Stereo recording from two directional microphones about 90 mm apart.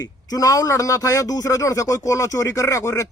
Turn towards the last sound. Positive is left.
turn(degrees=35)  # may be behind; listen again after turning